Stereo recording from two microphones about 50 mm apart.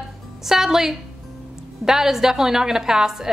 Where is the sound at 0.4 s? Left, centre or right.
Centre.